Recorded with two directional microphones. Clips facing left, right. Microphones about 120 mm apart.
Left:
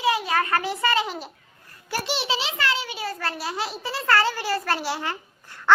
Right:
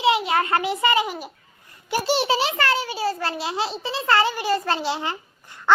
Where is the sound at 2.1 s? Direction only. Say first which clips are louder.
Right 8 dB; 45° right (ahead or behind).